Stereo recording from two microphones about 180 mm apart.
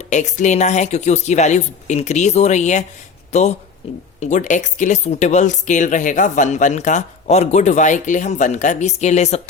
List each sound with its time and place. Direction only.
0.0 s speech: 40° left (ahead or behind)